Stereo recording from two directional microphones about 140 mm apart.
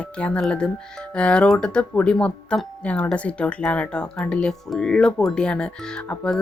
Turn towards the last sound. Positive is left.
turn(degrees=5)  # may be behind; listen again after turning